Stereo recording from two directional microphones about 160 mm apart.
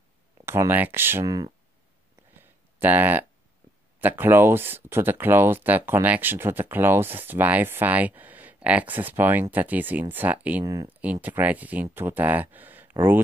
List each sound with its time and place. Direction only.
0.5 s speech: 15° right (ahead or behind)
2.3 s a sound: 10° right (ahead or behind)
4.0 s speech: 10° right (ahead or behind)
10.6 s speech: 20° right (ahead or behind)
10.9 s speech: 10° right (ahead or behind)